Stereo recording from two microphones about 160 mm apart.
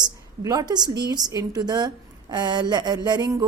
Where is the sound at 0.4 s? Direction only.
25° right (ahead or behind).